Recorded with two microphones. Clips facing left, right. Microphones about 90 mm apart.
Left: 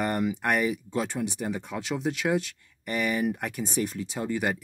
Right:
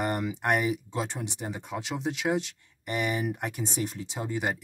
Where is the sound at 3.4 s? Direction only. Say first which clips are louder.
Left 2 dB; 30° right (ahead or behind).